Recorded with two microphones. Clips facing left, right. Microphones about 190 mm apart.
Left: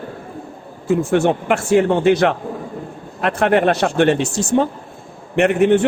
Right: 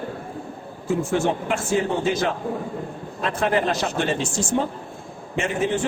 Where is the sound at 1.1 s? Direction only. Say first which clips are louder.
Left 7 dB; 65° left (ahead or behind).